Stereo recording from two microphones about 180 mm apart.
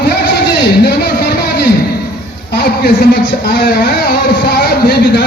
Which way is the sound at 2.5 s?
60° left (ahead or behind).